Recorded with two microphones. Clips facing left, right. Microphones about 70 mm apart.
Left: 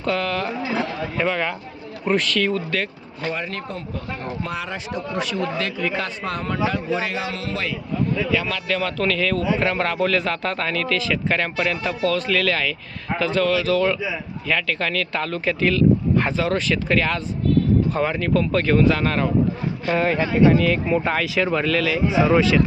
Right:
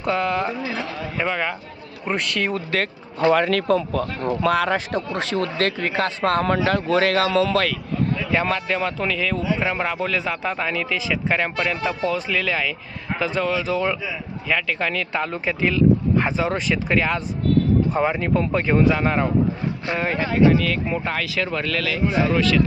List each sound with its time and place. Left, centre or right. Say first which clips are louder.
0.0 s speech: right 1 dB; centre
1.1 s a man's voice: even; centre
2.4 s speech: left 1 dB; right
3.2 s speech: right 10 dB; right
4.4 s a man's voice: right 9 dB; right
5.5 s speech: right 2 dB; right
6.4 s a man's voice: right 4 dB; right
8.3 s a man's voice: right 1 dB; right; by 19.3 s centre
19.9 s a man's voice: left 4 dB; centre
22.2 s speech: left 3 dB; left